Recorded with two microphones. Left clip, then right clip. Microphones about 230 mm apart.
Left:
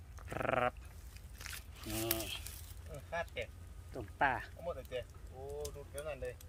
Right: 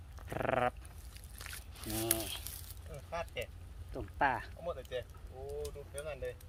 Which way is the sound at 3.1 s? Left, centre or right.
Right.